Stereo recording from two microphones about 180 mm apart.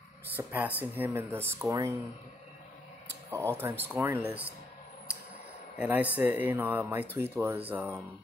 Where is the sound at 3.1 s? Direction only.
15° right (ahead or behind).